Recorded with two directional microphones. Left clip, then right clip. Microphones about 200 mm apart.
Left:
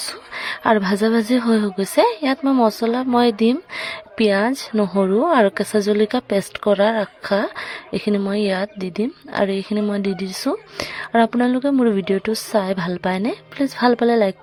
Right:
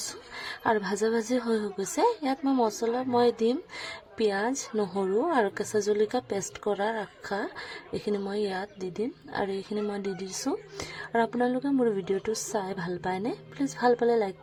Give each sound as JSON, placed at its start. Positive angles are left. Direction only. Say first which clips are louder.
{"t": 0.6, "sound": "speech", "louder": "left 9 dB", "side_deg": 25}